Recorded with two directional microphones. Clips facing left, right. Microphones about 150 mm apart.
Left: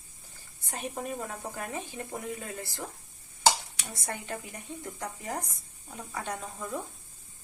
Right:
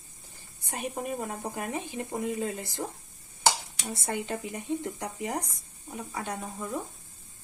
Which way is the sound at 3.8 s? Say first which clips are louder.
Right 5 dB; 25° right (ahead or behind).